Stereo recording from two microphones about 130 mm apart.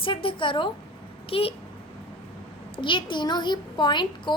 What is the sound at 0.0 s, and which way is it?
A woman's voice, 40° left (ahead or behind).